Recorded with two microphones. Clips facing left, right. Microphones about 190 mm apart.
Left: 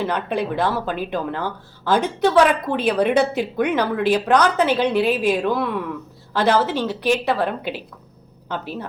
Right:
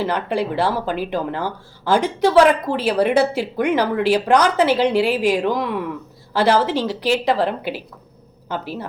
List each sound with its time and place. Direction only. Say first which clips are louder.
0.1 s speech: right 1 dB; 10° right (ahead or behind)